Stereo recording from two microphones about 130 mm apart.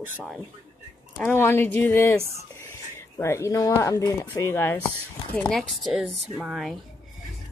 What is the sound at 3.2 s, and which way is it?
Speech, 20° left (ahead or behind).